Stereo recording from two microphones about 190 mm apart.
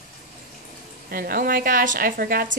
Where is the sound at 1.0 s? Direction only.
50° right (ahead or behind).